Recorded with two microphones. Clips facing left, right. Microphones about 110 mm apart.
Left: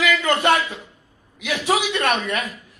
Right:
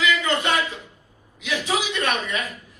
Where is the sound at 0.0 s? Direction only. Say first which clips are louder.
Left 3 dB; 60° left (ahead or behind).